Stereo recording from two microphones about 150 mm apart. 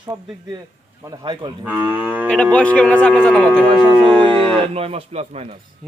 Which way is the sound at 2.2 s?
5° left (ahead or behind).